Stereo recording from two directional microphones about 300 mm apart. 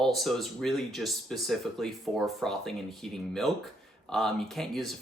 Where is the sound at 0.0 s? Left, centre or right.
Centre.